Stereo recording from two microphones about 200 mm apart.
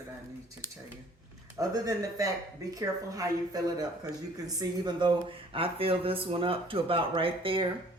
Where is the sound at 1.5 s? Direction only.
15° right (ahead or behind).